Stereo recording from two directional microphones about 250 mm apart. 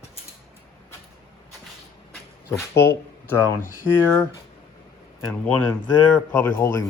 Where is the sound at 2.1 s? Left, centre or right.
Centre.